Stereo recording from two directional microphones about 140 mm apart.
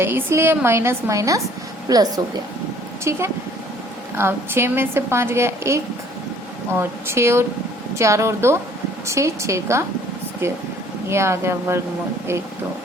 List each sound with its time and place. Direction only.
0.0 s a woman's voice: 15° right (ahead or behind)